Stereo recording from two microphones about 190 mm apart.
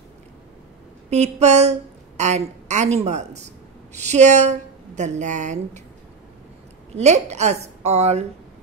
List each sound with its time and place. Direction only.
1.1 s a woman's voice: 35° right (ahead or behind)
7.0 s a woman's voice: 35° right (ahead or behind)